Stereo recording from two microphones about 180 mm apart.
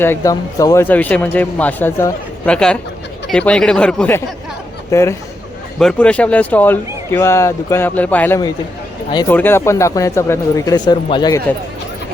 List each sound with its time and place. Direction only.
0.0 s speech: 15° left (ahead or behind)